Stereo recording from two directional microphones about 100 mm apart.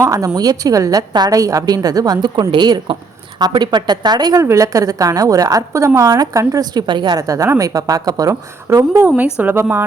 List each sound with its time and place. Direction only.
0.0 s a woman's voice: 35° right (ahead or behind)
4.4 s a woman's voice: 30° right (ahead or behind); by 7.2 s 50° right (ahead or behind)
7.2 s a woman's voice: 35° right (ahead or behind)
9.0 s a woman's voice: 15° right (ahead or behind)